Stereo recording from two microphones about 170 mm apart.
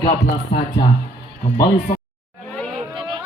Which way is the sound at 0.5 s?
30° left (ahead or behind).